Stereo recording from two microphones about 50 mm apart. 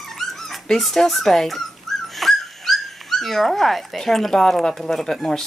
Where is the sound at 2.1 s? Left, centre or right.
Centre.